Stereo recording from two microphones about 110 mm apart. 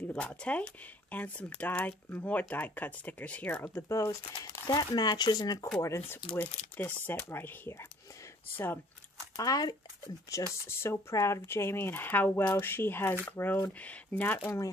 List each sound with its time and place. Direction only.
0.1 s speech: 10° left (ahead or behind); by 5.7 s 35° left (ahead or behind)
5.8 s speech: 25° left (ahead or behind)
9.4 s speech: 35° left (ahead or behind); by 14.5 s 15° left (ahead or behind)